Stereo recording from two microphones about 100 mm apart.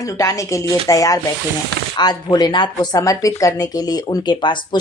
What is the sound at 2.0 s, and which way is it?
Speech, 45° left (ahead or behind).